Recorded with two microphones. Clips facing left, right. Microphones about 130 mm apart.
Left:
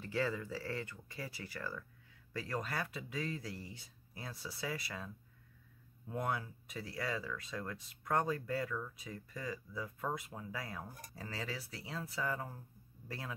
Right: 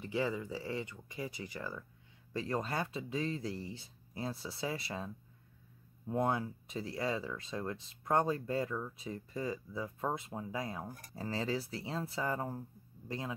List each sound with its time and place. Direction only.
0.0 s speech: 15° right (ahead or behind)
13.1 s speech: 20° right (ahead or behind)